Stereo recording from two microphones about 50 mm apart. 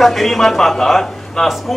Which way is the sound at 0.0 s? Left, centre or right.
Centre.